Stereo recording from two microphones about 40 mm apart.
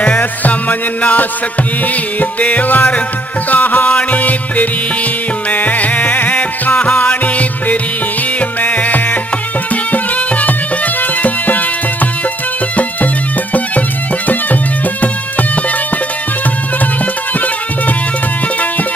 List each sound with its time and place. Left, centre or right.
0.2 s music: left
2.4 s music: left